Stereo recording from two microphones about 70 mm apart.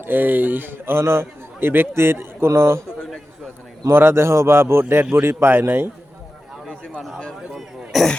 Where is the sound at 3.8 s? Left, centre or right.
Right.